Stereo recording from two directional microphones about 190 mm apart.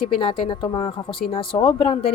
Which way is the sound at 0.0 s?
30° left (ahead or behind).